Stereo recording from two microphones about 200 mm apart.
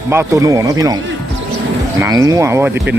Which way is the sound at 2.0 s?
15° right (ahead or behind).